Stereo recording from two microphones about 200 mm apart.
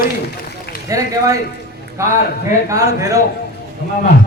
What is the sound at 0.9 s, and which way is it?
Speech, 15° right (ahead or behind).